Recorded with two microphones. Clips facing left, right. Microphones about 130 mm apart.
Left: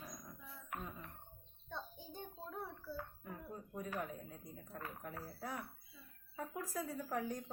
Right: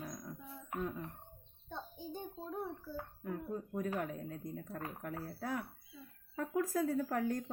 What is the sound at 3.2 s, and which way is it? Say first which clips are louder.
Speech: right 9 dB; 55° right (ahead or behind).